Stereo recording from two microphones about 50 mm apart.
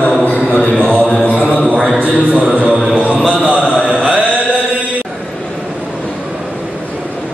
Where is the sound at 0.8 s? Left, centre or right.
Centre.